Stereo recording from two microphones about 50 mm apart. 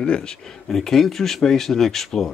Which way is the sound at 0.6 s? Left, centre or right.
Centre.